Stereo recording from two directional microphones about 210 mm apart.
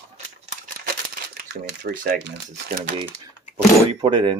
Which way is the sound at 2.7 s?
40° right (ahead or behind).